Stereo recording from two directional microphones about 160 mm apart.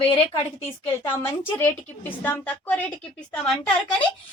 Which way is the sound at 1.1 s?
15° left (ahead or behind).